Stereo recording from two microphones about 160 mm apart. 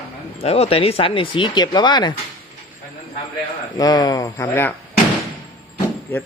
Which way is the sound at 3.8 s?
25° left (ahead or behind).